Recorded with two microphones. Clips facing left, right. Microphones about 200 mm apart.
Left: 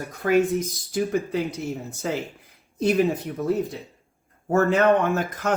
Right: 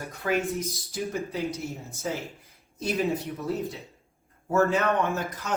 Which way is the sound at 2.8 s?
60° left (ahead or behind).